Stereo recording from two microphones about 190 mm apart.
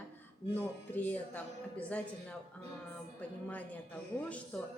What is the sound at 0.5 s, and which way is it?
A woman's voice, 10° left (ahead or behind).